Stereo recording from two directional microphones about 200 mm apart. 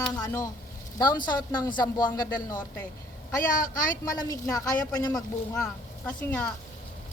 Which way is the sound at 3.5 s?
45° left (ahead or behind).